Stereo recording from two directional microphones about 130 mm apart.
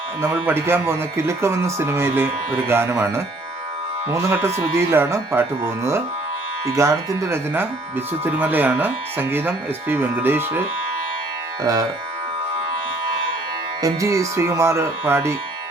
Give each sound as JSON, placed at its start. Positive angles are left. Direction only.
{"t": 0.3, "sound": "speech", "side_deg": -15}
{"t": 4.7, "sound": "speech", "side_deg": -20}
{"t": 11.6, "sound": "speech", "side_deg": -30}
{"t": 13.8, "sound": "speech", "side_deg": -25}